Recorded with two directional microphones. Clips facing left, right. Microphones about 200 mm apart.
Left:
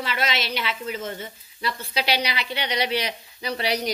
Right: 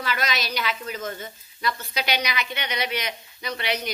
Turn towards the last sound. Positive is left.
turn(degrees=35)  # may be behind; listen again after turning